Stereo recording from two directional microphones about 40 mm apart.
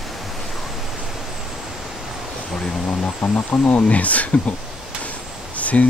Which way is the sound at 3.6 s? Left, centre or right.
Left.